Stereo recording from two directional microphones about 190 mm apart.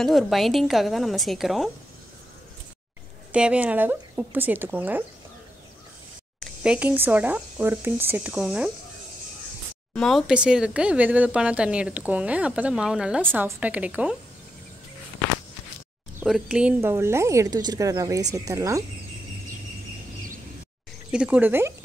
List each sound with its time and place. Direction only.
0.0 s speech: centre (ahead or behind)
3.3 s speech: 5° right (ahead or behind)
6.4 s speech: 5° right (ahead or behind)
9.9 s speech: centre (ahead or behind)
16.3 s speech: centre (ahead or behind); by 18.9 s 15° right (ahead or behind)
21.1 s speech: 5° right (ahead or behind)